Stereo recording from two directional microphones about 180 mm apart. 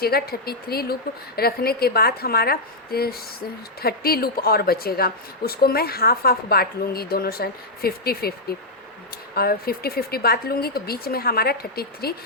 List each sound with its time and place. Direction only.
0.0 s a woman's voice: 60° left (ahead or behind)